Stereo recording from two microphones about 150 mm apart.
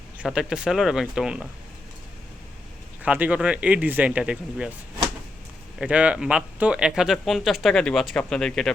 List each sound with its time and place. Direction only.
0.2 s speech: 5° right (ahead or behind)
3.0 s speech: 10° right (ahead or behind)
5.8 s speech: 10° right (ahead or behind)